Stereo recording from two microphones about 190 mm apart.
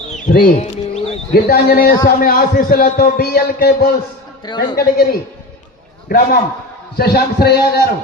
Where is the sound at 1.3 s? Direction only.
50° left (ahead or behind).